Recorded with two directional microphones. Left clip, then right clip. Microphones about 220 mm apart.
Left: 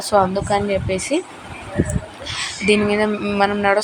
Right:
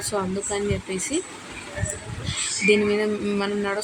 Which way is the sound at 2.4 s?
15° left (ahead or behind).